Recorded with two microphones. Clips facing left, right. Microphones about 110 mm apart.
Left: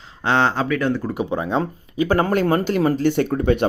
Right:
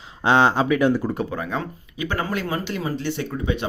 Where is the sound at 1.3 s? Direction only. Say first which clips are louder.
Left 6 dB; 25° left (ahead or behind).